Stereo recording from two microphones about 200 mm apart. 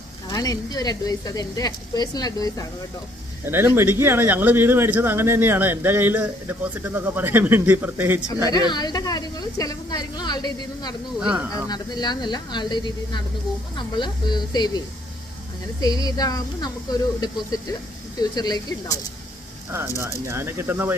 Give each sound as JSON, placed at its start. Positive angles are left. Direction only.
{"t": 0.3, "sound": "speech", "side_deg": 20}
{"t": 3.4, "sound": "speech", "side_deg": -10}
{"t": 8.4, "sound": "speech", "side_deg": 20}
{"t": 11.2, "sound": "speech", "side_deg": -5}
{"t": 11.5, "sound": "speech", "side_deg": 20}
{"t": 15.8, "sound": "speech", "side_deg": 20}
{"t": 20.0, "sound": "speech", "side_deg": -15}